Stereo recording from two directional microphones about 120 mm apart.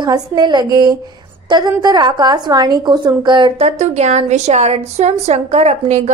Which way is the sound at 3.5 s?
65° right (ahead or behind).